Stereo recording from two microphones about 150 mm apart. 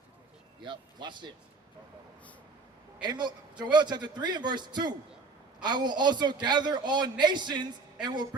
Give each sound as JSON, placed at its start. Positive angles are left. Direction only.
{"t": 0.6, "sound": "speech", "side_deg": -30}
{"t": 3.0, "sound": "a man's voice", "side_deg": -30}